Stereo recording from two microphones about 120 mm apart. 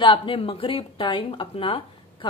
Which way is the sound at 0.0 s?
45° left (ahead or behind).